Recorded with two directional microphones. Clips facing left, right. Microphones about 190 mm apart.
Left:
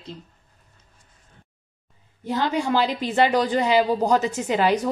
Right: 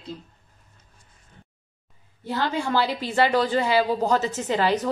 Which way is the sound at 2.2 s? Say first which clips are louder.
Left 2 dB; 15° left (ahead or behind).